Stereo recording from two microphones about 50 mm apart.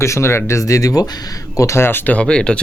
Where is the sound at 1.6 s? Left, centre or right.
Left.